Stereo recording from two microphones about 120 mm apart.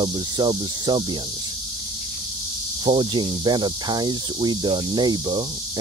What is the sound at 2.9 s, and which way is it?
Speech, 40° right (ahead or behind).